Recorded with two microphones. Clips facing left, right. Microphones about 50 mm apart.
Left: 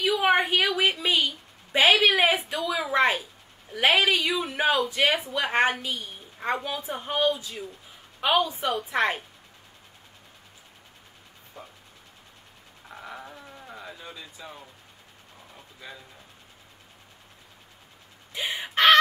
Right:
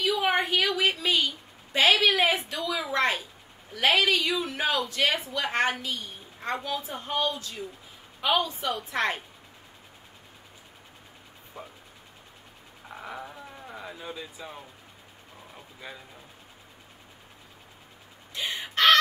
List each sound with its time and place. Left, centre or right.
0.1 s a sound: centre
3.7 s a woman's voice: centre
11.6 s speech: centre
12.8 s a sound: centre
15.5 s vehicle: centre
18.3 s chicken: centre